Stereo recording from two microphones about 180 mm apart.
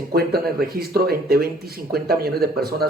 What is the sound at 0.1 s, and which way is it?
Speech, 60° right (ahead or behind).